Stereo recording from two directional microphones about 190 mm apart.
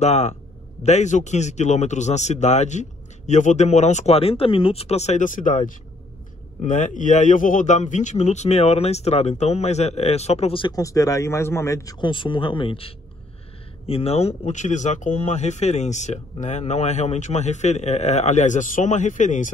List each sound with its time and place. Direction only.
0.0 s a man's voice: 35° left (ahead or behind)